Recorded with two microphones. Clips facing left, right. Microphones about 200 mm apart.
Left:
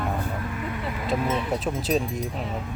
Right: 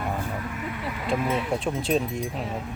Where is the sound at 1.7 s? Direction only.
5° left (ahead or behind).